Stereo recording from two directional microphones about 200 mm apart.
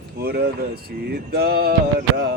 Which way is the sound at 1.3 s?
50° right (ahead or behind).